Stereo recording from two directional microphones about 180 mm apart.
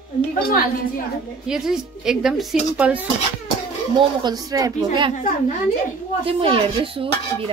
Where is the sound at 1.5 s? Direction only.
5° right (ahead or behind).